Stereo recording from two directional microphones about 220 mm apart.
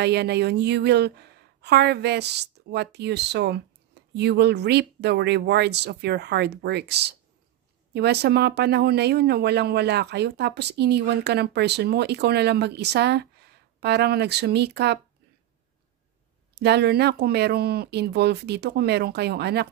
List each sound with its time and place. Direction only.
0.0 s speech: 50° right (ahead or behind)
16.5 s speech: 50° right (ahead or behind)